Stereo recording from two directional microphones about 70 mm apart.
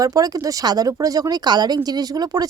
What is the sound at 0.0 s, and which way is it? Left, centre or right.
Speech, right.